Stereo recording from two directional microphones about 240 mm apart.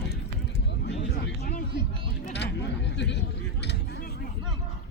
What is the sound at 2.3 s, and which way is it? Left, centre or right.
Chatter, left.